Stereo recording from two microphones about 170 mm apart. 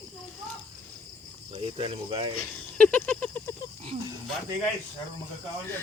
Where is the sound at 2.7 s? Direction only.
10° left (ahead or behind).